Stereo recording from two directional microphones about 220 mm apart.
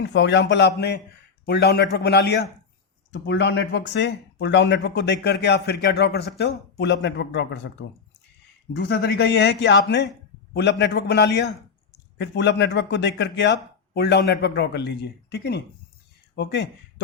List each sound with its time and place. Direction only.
0.0 s speech: 50° left (ahead or behind)
8.7 s speech: 50° left (ahead or behind)